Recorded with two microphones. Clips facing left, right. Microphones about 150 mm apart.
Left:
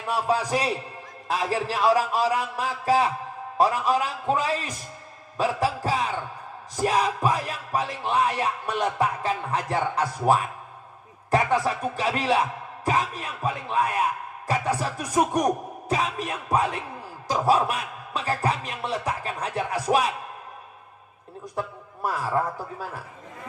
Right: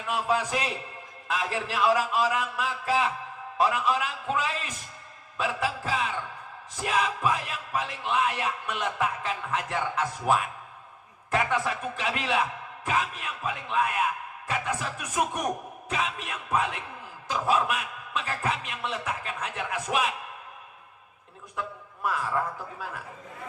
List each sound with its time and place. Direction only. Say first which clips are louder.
0.0 s speech: left 3 dB; 35° left (ahead or behind)
21.5 s a man's voice: left 4 dB; 35° left (ahead or behind)